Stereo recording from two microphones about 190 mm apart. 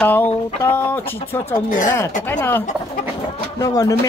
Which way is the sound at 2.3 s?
10° left (ahead or behind).